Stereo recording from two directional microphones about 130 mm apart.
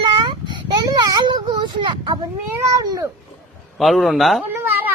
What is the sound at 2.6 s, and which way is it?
Cat, 25° right (ahead or behind).